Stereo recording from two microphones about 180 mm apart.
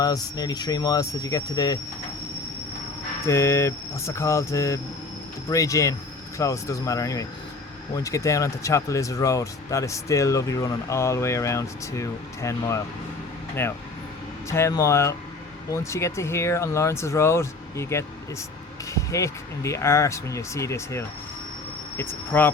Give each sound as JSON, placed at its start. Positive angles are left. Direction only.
{"t": 0.0, "sound": "speech", "side_deg": 20}
{"t": 3.2, "sound": "speech", "side_deg": 15}